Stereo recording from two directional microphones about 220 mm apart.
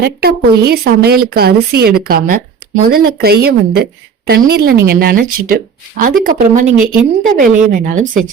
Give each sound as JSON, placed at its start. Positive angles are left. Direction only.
{"t": 0.0, "sound": "speech", "side_deg": -45}